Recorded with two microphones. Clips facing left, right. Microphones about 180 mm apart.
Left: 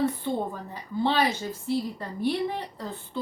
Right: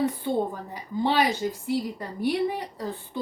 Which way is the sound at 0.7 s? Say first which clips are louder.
Right 1 dB; 10° right (ahead or behind).